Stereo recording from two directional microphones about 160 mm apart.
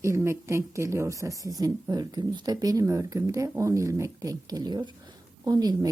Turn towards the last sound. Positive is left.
turn(degrees=-25)  # may be behind; listen again after turning